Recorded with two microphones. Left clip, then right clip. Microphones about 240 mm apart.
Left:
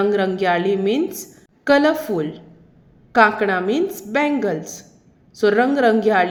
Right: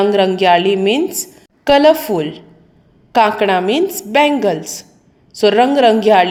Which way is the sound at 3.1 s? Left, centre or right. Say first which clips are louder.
Right 3 dB; centre.